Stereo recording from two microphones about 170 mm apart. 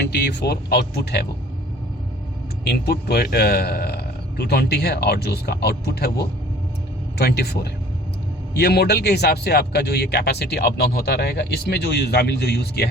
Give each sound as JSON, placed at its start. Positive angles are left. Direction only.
{"t": 0.0, "sound": "speech", "side_deg": 80}
{"t": 2.6, "sound": "speech", "side_deg": 70}